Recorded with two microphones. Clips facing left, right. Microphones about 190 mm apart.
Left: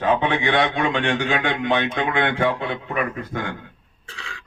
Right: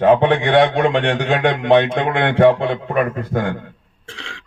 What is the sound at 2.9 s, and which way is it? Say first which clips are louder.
Speech: right 6 dB; 50° right (ahead or behind).